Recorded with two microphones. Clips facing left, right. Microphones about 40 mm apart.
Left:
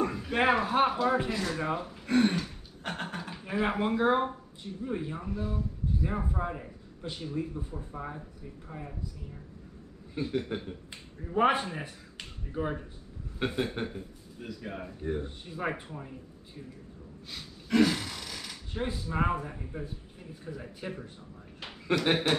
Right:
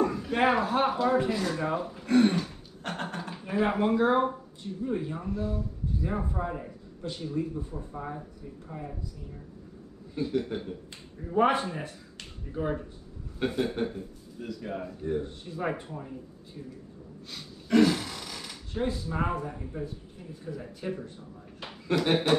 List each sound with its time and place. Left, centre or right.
0.0 s speech: centre
10.1 s speech: centre
17.3 s a sound: centre
18.7 s speech: centre